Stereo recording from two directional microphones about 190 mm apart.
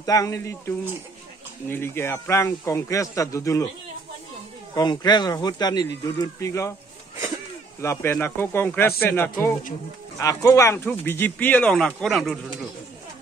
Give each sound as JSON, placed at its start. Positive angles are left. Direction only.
{"t": 0.0, "sound": "speech", "side_deg": 20}
{"t": 4.7, "sound": "speech", "side_deg": 20}
{"t": 7.8, "sound": "speech", "side_deg": 10}